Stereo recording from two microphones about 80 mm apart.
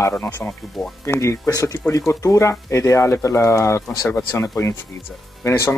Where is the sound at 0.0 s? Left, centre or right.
Left.